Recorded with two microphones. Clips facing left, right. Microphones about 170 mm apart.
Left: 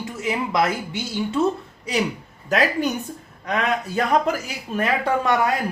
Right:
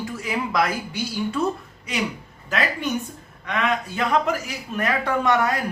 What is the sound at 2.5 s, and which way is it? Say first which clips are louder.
Speech: left 4 dB; 40° left (ahead or behind).